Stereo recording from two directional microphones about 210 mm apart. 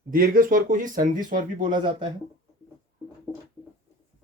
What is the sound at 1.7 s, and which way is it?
Speech, 20° right (ahead or behind).